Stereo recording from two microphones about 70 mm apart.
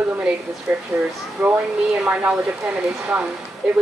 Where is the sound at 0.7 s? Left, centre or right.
Right.